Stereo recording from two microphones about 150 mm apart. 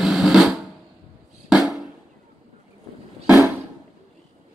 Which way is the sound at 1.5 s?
Centre (ahead or behind).